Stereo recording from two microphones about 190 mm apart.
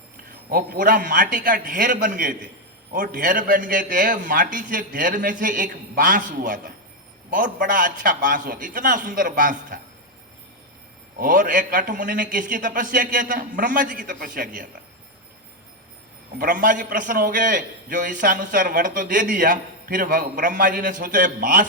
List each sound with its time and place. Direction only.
0.5 s a man's voice: 50° right (ahead or behind)
11.2 s a man's voice: 45° right (ahead or behind)
16.4 s a man's voice: 45° right (ahead or behind)